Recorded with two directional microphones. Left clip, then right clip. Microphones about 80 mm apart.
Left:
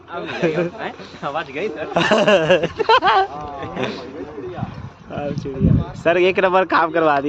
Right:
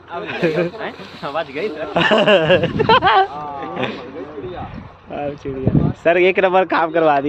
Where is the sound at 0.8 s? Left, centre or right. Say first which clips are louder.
Right 1 dB; left.